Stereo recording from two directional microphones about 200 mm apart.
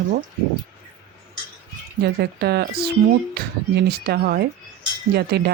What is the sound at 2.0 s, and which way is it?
Speech, 55° right (ahead or behind).